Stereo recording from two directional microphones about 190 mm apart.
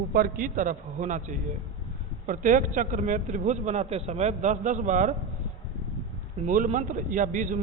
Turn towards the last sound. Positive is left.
turn(degrees=-45)  # may be behind; listen again after turning